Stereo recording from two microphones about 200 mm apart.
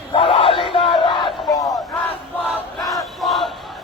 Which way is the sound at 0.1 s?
30° left (ahead or behind).